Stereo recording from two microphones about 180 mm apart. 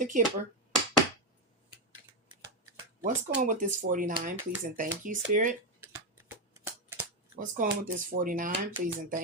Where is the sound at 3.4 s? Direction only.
45° right (ahead or behind).